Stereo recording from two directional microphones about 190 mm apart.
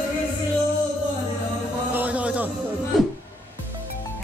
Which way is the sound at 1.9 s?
10° right (ahead or behind).